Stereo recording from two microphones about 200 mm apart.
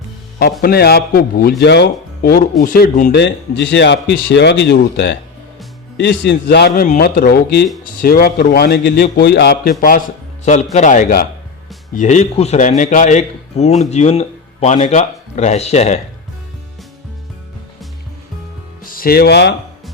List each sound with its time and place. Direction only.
0.6 s a man's voice: 50° left (ahead or behind)
10.4 s a man's voice: 35° left (ahead or behind)
18.8 s speech: 45° left (ahead or behind)